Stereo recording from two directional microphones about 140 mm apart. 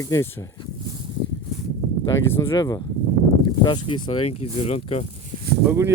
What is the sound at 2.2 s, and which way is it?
Speech, 15° left (ahead or behind).